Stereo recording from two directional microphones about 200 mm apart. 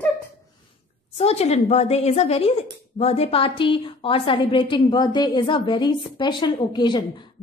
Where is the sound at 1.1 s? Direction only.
30° left (ahead or behind).